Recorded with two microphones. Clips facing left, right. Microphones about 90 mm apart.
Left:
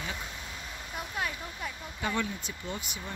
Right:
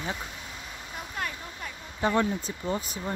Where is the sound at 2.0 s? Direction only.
35° right (ahead or behind).